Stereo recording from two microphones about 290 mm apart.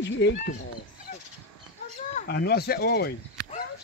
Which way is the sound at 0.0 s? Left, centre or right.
Left.